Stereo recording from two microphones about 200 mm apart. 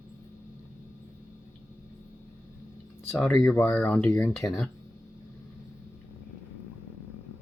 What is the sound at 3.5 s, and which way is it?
Speech, 10° left (ahead or behind).